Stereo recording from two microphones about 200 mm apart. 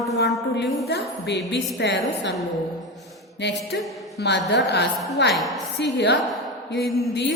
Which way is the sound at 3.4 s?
60° left (ahead or behind).